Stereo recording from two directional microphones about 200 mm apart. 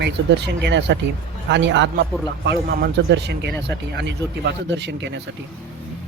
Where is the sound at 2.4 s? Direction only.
50° right (ahead or behind).